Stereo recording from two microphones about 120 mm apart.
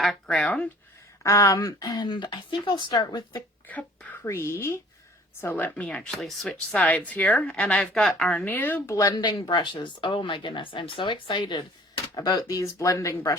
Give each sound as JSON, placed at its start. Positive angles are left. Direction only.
{"t": 0.0, "sound": "speech", "side_deg": 5}
{"t": 1.2, "sound": "speech", "side_deg": 25}
{"t": 3.7, "sound": "speech", "side_deg": 10}
{"t": 9.0, "sound": "speech", "side_deg": 30}